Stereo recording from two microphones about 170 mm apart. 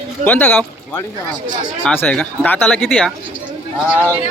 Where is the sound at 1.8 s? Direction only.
5° left (ahead or behind).